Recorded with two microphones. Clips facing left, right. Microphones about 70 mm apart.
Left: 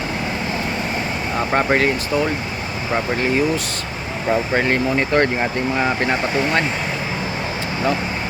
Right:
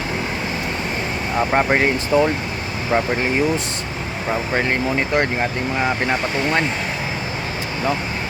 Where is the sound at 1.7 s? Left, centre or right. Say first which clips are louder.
Right 1 dB; centre.